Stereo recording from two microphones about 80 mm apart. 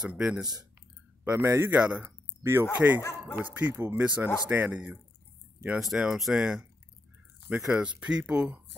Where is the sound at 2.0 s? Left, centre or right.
Right.